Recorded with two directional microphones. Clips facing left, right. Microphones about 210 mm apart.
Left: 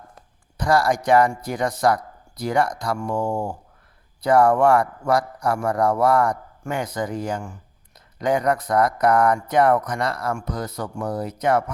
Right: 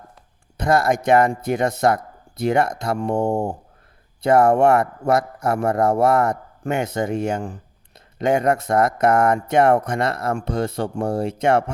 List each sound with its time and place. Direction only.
0.5 s speech: 25° right (ahead or behind)